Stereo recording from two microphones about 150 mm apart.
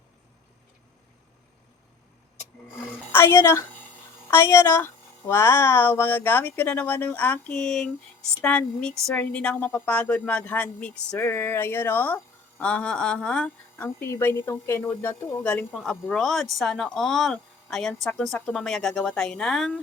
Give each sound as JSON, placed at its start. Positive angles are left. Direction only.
{"t": 3.1, "sound": "speech", "side_deg": 15}